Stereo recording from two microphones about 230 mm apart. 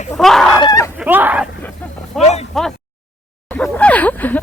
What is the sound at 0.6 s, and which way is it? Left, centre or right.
Fowl, centre.